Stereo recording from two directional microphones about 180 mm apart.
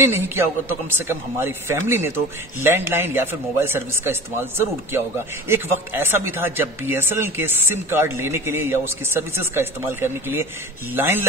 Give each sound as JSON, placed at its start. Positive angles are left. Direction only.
{"t": 0.0, "sound": "a man's voice", "side_deg": -15}